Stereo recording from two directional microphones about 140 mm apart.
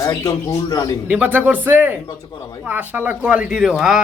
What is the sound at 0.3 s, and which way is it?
Speech, 25° left (ahead or behind).